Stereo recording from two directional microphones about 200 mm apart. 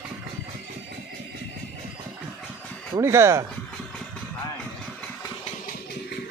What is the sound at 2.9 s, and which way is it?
Speech, 15° right (ahead or behind).